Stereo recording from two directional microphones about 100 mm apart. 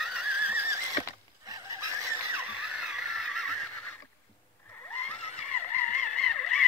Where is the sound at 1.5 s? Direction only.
35° right (ahead or behind).